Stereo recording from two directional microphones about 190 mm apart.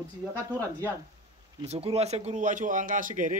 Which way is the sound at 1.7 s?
30° right (ahead or behind).